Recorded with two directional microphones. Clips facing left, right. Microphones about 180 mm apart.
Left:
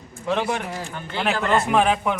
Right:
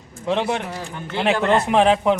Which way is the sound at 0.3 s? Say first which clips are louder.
Right 2 dB; 20° right (ahead or behind).